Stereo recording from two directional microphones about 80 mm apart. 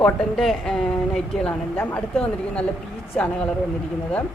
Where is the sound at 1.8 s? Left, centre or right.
Left.